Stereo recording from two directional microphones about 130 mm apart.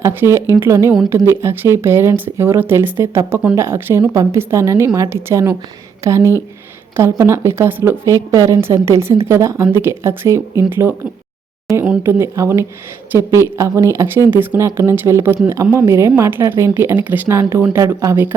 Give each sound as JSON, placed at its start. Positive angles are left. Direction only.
{"t": 0.0, "sound": "speech", "side_deg": -20}
{"t": 12.0, "sound": "speech", "side_deg": -20}